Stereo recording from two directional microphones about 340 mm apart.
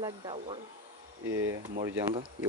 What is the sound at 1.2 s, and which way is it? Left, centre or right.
Speech, right.